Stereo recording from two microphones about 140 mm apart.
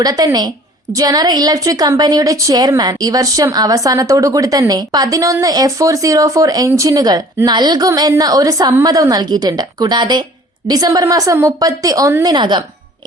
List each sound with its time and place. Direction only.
0.0 s a woman's voice: 25° right (ahead or behind)